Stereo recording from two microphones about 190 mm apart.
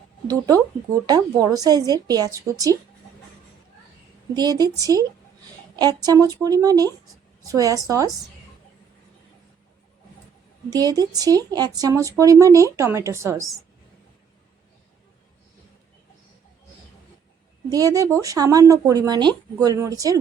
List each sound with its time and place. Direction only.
0.3 s speech: 20° right (ahead or behind)
4.4 s a woman's voice: 20° right (ahead or behind)
10.7 s a woman's voice: 20° right (ahead or behind)
17.7 s speech: 20° right (ahead or behind)